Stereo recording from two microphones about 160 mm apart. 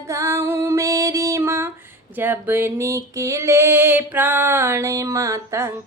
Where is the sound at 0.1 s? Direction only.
15° right (ahead or behind).